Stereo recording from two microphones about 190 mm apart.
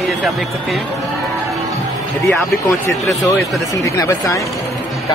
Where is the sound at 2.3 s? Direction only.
10° left (ahead or behind).